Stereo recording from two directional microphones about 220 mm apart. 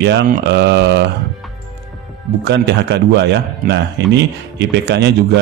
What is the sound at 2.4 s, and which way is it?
Speech, 50° right (ahead or behind).